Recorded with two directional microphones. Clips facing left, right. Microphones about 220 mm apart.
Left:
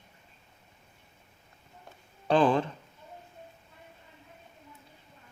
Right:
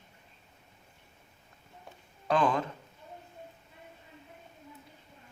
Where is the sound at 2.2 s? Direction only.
30° left (ahead or behind).